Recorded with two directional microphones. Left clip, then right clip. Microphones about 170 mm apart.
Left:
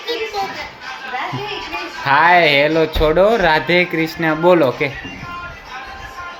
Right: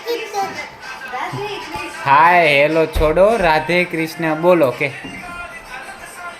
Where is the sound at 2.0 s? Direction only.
20° left (ahead or behind).